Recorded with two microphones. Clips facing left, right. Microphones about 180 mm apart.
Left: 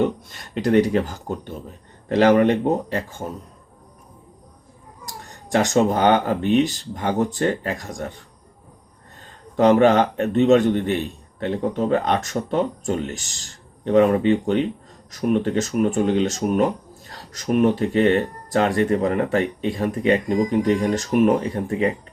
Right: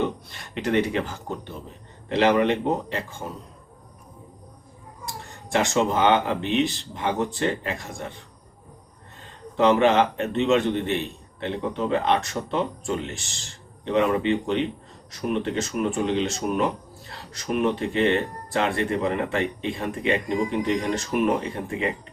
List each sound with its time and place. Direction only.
0.3 s speech: 40° left (ahead or behind)
5.5 s speech: 40° left (ahead or behind)
9.6 s speech: 40° left (ahead or behind)